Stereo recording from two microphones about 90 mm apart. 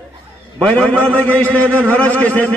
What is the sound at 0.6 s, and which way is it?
A man's voice, 10° left (ahead or behind).